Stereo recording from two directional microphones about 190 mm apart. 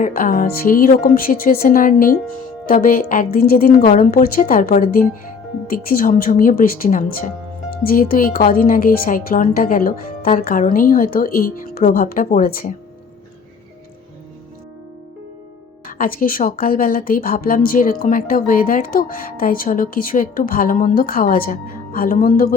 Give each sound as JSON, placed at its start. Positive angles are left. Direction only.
{"t": 0.0, "sound": "speech", "side_deg": 45}
{"t": 15.9, "sound": "speech", "side_deg": 50}